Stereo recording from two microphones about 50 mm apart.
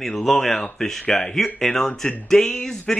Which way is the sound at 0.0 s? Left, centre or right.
Centre.